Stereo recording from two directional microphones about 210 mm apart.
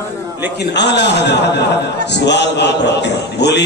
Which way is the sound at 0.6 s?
55° left (ahead or behind).